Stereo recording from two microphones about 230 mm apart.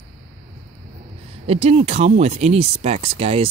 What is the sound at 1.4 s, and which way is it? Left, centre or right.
Speech, right.